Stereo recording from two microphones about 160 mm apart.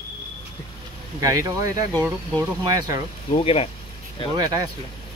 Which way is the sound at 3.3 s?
35° left (ahead or behind).